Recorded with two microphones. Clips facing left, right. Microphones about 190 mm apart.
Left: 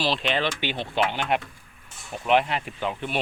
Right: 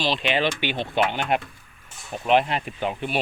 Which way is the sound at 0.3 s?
15° right (ahead or behind).